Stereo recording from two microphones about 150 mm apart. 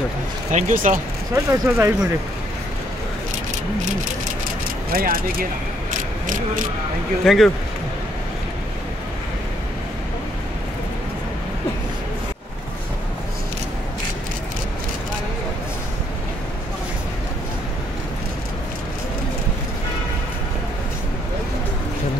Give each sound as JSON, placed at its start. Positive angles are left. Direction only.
{"t": 0.5, "sound": "speech", "side_deg": -55}
{"t": 1.3, "sound": "speech", "side_deg": -15}
{"t": 4.9, "sound": "speech", "side_deg": -75}
{"t": 7.2, "sound": "speech", "side_deg": 0}